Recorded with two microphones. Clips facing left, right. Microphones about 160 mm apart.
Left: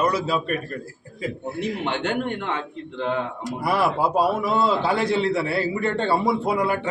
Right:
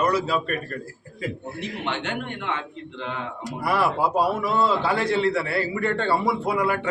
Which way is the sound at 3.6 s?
15° left (ahead or behind).